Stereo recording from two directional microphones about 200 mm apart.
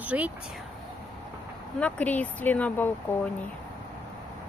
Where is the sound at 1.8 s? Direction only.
5° left (ahead or behind).